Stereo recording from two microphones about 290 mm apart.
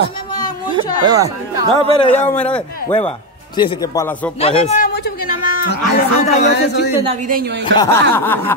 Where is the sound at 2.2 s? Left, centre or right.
Centre.